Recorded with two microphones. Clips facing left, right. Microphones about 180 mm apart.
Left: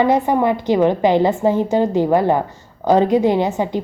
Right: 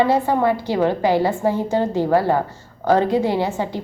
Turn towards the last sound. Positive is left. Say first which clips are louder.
# left 4 dB
turn(degrees=20)  # may be behind; listen again after turning